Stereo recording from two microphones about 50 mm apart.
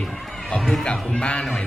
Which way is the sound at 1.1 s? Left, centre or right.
Left.